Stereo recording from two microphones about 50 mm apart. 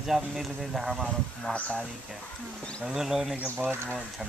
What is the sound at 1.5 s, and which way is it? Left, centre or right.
Speech, left.